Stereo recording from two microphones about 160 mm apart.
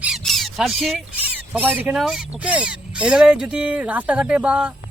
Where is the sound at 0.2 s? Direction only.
Centre (ahead or behind).